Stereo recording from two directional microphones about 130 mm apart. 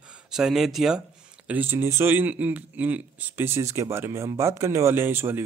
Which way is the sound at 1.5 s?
15° right (ahead or behind).